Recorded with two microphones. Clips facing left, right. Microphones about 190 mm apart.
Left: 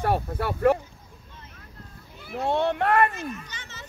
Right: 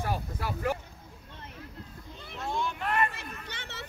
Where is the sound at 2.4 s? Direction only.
65° left (ahead or behind).